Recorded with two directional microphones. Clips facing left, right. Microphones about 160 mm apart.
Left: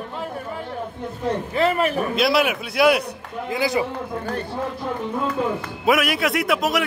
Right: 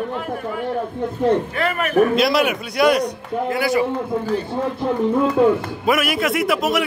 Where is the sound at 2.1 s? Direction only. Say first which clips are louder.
Right 2 dB; centre (ahead or behind).